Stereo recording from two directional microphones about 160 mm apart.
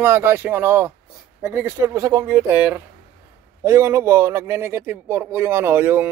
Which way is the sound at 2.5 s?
10° right (ahead or behind).